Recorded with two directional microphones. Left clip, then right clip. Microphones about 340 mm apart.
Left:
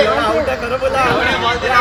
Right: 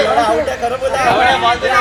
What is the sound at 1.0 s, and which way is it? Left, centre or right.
Speech, centre.